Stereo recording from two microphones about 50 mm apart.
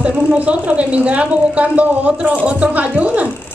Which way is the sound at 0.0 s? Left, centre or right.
Right.